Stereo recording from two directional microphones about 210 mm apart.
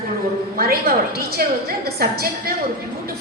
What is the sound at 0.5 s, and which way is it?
Speech, 45° right (ahead or behind).